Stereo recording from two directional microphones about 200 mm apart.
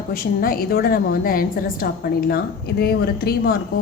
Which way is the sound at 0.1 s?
45° left (ahead or behind).